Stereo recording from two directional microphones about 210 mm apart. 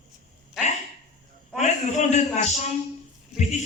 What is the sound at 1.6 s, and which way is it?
A woman's voice, 35° left (ahead or behind).